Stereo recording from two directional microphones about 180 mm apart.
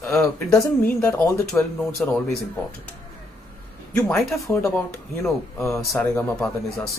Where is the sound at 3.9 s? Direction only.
10° left (ahead or behind).